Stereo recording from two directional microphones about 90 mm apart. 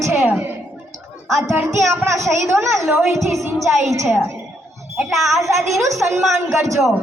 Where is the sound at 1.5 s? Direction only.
35° right (ahead or behind).